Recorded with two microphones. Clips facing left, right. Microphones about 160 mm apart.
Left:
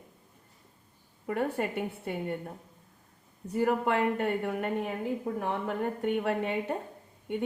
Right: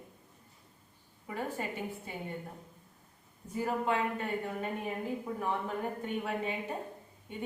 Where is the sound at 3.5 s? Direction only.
65° left (ahead or behind).